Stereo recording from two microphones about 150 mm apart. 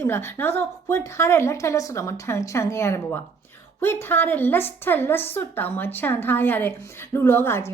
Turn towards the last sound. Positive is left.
turn(degrees=15)  # may be behind; listen again after turning